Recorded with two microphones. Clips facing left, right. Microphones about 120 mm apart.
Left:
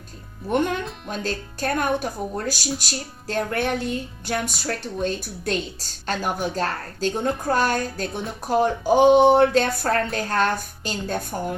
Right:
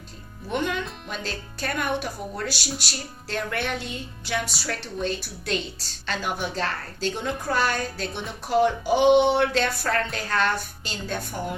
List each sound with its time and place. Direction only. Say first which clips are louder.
0.4 s speech: left 4 dB; 50° left (ahead or behind)